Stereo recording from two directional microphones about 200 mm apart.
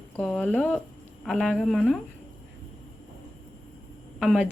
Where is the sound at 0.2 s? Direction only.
5° left (ahead or behind).